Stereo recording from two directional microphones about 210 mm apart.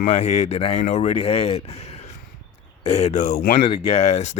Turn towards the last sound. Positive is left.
turn(degrees=30)  # may be behind; listen again after turning